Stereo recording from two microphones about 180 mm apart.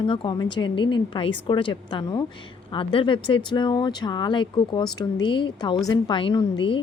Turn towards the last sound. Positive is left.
turn(degrees=25)  # may be behind; listen again after turning